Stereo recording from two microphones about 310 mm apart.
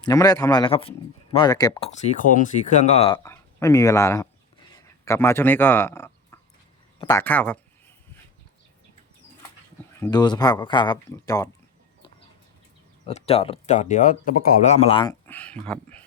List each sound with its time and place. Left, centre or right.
0.0 s a man's voice: centre
4.7 s a sound: centre
7.0 s speech: centre
10.0 s a man's voice: centre
13.1 s speech: centre